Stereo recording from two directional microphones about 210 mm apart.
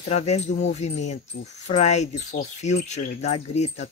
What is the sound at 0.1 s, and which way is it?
Speech, 30° left (ahead or behind).